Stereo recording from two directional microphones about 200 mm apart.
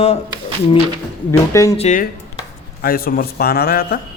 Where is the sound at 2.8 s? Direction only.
45° left (ahead or behind).